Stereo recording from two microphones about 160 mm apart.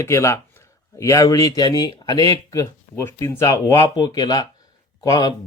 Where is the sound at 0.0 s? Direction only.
15° left (ahead or behind).